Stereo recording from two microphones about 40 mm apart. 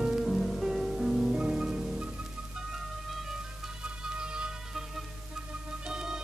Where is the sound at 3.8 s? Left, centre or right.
Right.